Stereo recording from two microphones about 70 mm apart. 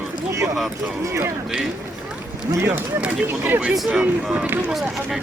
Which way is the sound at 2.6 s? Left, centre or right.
Centre.